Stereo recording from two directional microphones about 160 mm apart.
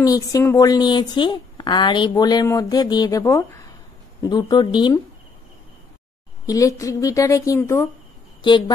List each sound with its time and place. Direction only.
0.0 s a woman's voice: 20° left (ahead or behind)
6.4 s a woman's voice: 20° left (ahead or behind)
8.4 s speech: 30° left (ahead or behind)